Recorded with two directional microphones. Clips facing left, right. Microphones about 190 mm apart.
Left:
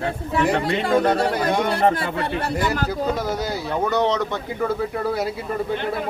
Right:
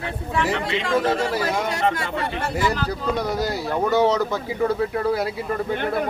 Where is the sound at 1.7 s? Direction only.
30° left (ahead or behind).